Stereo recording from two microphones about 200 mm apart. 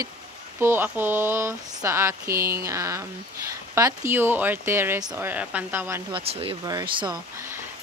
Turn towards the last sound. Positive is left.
turn(degrees=-15)  # may be behind; listen again after turning